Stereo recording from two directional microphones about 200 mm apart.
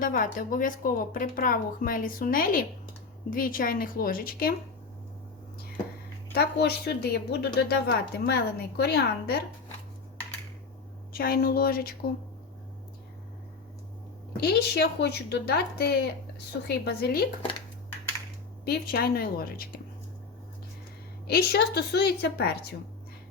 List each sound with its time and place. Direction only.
0.0 s a woman's voice: 45° left (ahead or behind)
6.3 s a woman's voice: 55° left (ahead or behind)
11.1 s a woman's voice: 50° left (ahead or behind)
14.4 s a woman's voice: 55° left (ahead or behind)
18.6 s a woman's voice: 50° left (ahead or behind)
21.2 s a woman's voice: 55° left (ahead or behind)